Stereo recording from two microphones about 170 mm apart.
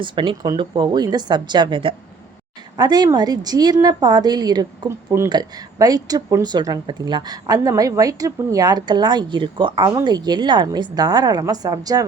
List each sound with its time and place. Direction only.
0.0 s speech: 30° right (ahead or behind)